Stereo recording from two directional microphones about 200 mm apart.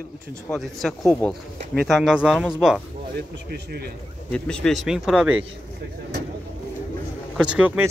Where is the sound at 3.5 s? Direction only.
50° right (ahead or behind).